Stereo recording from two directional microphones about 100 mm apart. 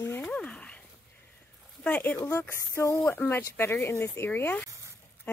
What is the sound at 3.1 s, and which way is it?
Speech, 20° left (ahead or behind).